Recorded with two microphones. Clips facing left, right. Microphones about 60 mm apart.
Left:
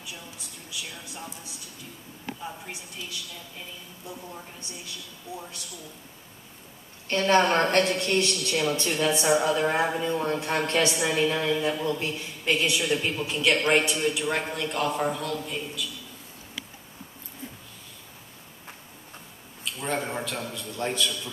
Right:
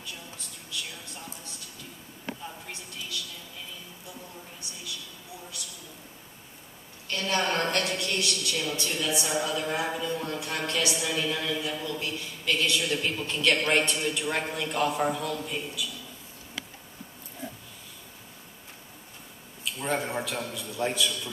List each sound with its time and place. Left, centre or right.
0.7 s a sound: centre
2.4 s a man's voice: centre
5.3 s a woman's voice: left
7.1 s a woman's voice: left; by 15.9 s centre
19.6 s a man's voice: centre